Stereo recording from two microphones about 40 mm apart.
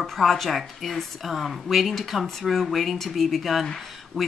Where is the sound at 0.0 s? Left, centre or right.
Centre.